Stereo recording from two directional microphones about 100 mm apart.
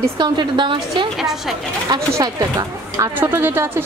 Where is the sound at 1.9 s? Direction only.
40° right (ahead or behind).